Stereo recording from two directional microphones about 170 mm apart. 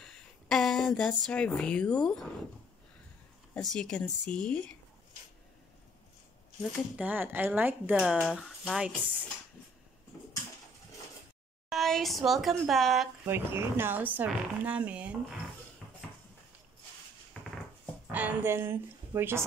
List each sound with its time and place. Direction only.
0.0 s speech: 5° left (ahead or behind)
3.7 s speech: 5° left (ahead or behind)
7.0 s speech: 10° right (ahead or behind)
11.7 s speech: centre (ahead or behind)
13.3 s speech: 15° right (ahead or behind)
18.0 s a woman's voice: 10° right (ahead or behind)